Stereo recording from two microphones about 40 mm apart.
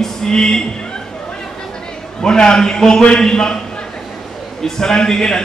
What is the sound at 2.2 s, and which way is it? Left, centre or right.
A man's voice, centre.